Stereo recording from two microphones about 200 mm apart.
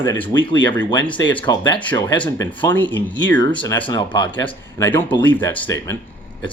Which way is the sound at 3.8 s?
20° left (ahead or behind).